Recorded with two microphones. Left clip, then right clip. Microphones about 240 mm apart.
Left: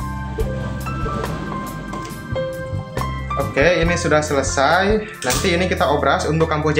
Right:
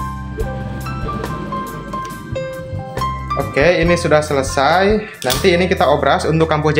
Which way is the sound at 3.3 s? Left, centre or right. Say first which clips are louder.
Right 2 dB; right.